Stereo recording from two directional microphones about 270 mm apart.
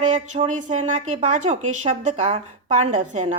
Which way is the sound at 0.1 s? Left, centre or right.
Right.